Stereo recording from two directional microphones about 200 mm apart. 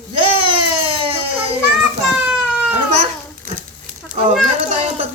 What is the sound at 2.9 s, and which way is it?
Babbling, 35° right (ahead or behind).